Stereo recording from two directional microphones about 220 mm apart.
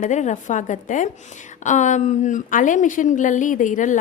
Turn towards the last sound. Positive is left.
turn(degrees=35)  # may be behind; listen again after turning